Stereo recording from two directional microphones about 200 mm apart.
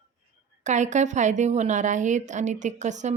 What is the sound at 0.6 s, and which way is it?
A woman's voice, 35° right (ahead or behind).